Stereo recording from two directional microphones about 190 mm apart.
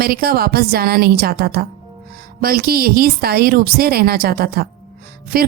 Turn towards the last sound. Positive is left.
turn(degrees=-50)  # may be behind; listen again after turning